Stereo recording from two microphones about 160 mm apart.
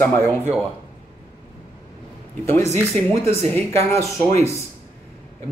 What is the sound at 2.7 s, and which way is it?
Speech, 15° left (ahead or behind).